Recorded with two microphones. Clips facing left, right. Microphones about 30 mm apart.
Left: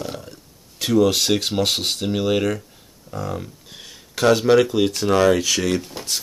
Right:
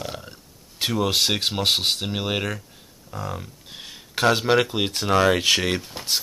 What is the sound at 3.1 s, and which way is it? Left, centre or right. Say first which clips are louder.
Speech: left 4 dB; centre.